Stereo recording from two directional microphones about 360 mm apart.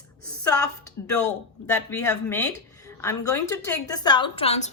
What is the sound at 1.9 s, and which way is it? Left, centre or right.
Speech, centre.